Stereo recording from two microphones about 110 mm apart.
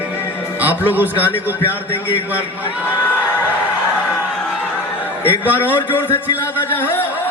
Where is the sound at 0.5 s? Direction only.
15° right (ahead or behind).